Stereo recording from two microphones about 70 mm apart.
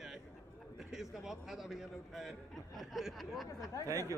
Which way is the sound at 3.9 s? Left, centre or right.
Right.